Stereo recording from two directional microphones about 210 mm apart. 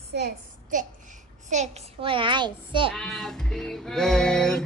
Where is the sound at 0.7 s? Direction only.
35° right (ahead or behind).